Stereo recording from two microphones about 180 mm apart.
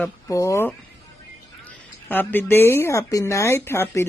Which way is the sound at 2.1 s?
10° left (ahead or behind).